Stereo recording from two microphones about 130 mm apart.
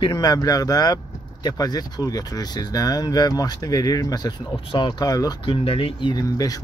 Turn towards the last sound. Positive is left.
turn(degrees=30)  # may be behind; listen again after turning